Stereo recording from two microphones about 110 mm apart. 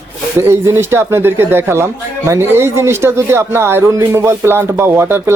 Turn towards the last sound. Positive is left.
turn(degrees=-20)  # may be behind; listen again after turning